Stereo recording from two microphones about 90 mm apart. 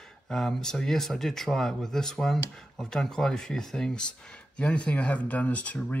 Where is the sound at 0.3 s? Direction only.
5° left (ahead or behind).